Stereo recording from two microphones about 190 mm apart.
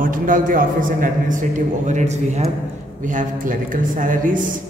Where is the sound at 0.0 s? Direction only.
45° right (ahead or behind).